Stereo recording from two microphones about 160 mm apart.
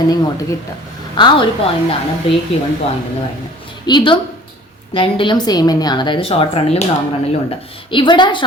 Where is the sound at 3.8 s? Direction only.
30° left (ahead or behind).